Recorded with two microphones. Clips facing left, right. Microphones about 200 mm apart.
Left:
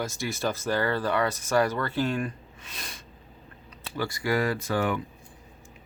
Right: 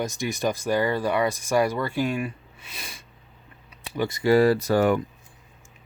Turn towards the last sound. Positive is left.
turn(degrees=-45)  # may be behind; listen again after turning